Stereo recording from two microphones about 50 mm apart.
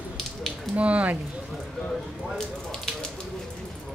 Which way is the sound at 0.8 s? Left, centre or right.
Right.